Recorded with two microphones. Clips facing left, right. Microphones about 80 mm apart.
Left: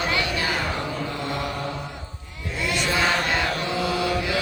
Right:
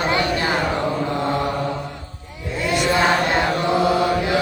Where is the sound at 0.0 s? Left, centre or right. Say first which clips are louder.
Right 5 dB; right.